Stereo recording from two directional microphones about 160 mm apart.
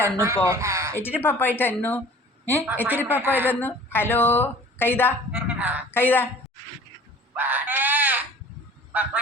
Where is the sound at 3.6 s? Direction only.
15° left (ahead or behind).